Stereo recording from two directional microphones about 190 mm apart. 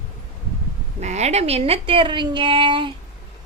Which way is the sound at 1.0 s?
35° right (ahead or behind).